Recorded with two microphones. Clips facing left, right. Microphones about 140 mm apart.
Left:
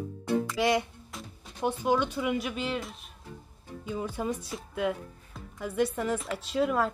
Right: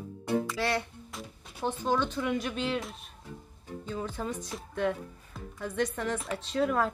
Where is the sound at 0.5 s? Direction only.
15° left (ahead or behind).